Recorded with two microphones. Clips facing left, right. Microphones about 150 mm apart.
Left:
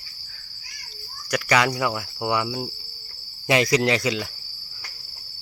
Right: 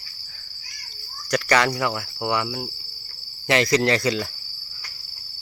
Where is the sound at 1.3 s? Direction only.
10° left (ahead or behind).